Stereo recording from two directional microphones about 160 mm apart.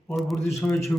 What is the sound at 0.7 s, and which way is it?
Speech, 15° left (ahead or behind).